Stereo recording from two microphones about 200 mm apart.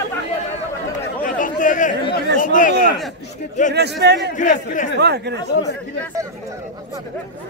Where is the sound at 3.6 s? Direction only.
40° left (ahead or behind).